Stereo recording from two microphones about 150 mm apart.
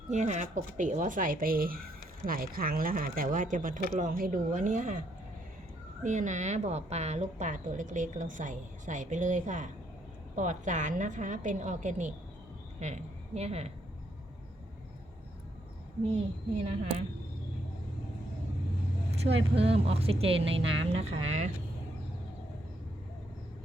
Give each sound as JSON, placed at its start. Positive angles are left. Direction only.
{"t": 0.1, "sound": "a woman's voice", "side_deg": -50}
{"t": 6.0, "sound": "a woman's voice", "side_deg": -55}
{"t": 19.2, "sound": "speech", "side_deg": -40}